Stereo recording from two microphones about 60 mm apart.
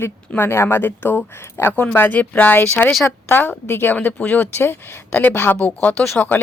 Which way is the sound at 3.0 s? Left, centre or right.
Left.